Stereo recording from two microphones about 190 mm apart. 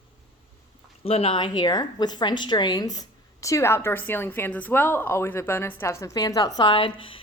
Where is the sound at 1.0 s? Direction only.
30° left (ahead or behind).